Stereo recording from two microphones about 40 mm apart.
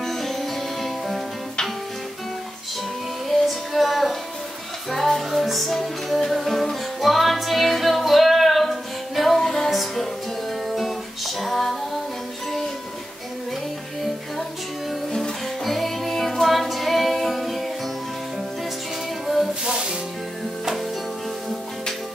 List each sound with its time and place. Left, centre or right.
0.0 s music: centre
3.3 s music: centre
15.6 s music: centre
19.6 s music: centre